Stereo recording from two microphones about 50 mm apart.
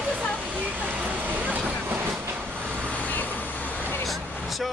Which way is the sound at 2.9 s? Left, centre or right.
Left.